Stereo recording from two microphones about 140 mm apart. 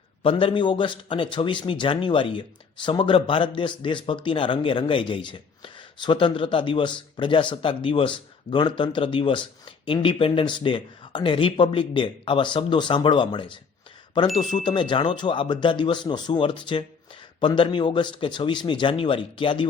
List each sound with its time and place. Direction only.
0.2 s speech: 40° left (ahead or behind)
14.6 s speech: 35° left (ahead or behind)